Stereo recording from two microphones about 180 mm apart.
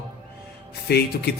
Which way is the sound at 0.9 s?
60° left (ahead or behind).